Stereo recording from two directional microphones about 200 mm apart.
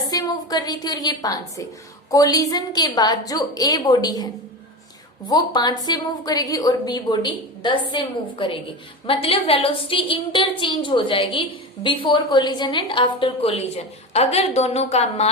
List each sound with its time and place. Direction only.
0.1 s a woman's voice: 20° left (ahead or behind)
5.3 s a woman's voice: 20° left (ahead or behind)